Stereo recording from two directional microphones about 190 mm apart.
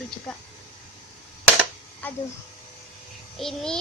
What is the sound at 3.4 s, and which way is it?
Speech, centre (ahead or behind).